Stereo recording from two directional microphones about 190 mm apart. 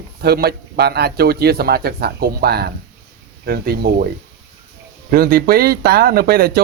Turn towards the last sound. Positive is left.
turn(degrees=-55)  # may be behind; listen again after turning